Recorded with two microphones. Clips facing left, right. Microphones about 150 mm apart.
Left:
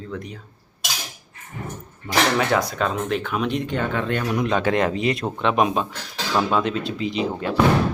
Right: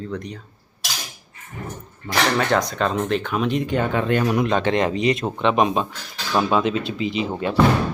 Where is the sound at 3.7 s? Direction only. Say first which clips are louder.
Right 3 dB; 10° right (ahead or behind).